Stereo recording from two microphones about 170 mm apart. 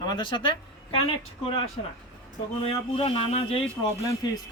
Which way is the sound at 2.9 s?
35° left (ahead or behind).